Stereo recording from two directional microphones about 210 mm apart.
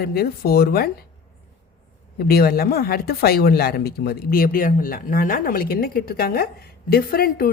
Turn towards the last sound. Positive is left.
turn(degrees=45)  # may be behind; listen again after turning